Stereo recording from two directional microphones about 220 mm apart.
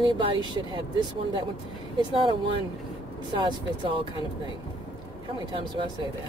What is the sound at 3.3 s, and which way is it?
Speech, 20° right (ahead or behind).